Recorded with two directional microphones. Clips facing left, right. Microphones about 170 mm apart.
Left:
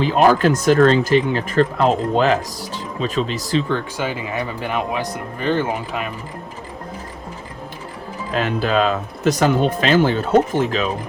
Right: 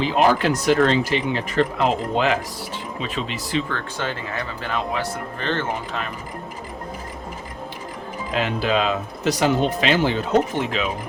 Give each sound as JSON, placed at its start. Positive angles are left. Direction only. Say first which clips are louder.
{"t": 0.0, "sound": "speech", "louder": "left 4 dB", "side_deg": 45}
{"t": 3.7, "sound": "speech", "louder": "left 5 dB", "side_deg": 10}
{"t": 8.3, "sound": "speech", "louder": "left 2 dB", "side_deg": 45}